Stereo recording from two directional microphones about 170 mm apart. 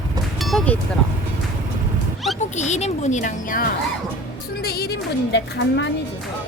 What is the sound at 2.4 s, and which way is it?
Speech, 40° left (ahead or behind).